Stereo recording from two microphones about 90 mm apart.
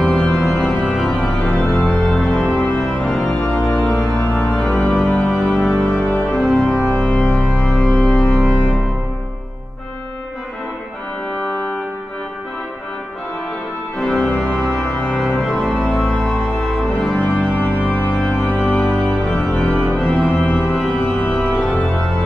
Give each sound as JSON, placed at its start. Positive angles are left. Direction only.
{"t": 0.0, "sound": "organ", "side_deg": 10}
{"t": 1.8, "sound": "music", "side_deg": 15}
{"t": 2.0, "sound": "music", "side_deg": 5}
{"t": 2.5, "sound": "music", "side_deg": 15}
{"t": 3.0, "sound": "organ", "side_deg": 10}
{"t": 5.5, "sound": "music", "side_deg": 5}
{"t": 6.8, "sound": "organ", "side_deg": 5}
{"t": 13.9, "sound": "organ", "side_deg": 5}
{"t": 15.3, "sound": "music", "side_deg": 10}
{"t": 20.7, "sound": "organ", "side_deg": 10}